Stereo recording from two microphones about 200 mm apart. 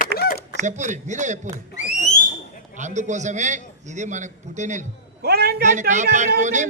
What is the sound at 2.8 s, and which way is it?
A man's voice, 35° right (ahead or behind).